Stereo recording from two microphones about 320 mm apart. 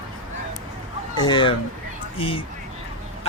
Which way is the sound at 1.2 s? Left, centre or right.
Centre.